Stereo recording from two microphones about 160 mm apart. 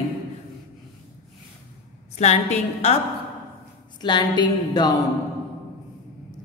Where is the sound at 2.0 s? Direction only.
45° left (ahead or behind).